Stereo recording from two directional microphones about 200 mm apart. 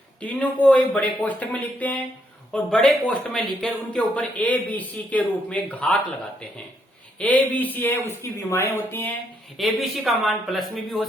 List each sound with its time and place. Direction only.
0.2 s speech: 5° left (ahead or behind)
7.2 s speech: 5° left (ahead or behind)
9.6 s speech: centre (ahead or behind)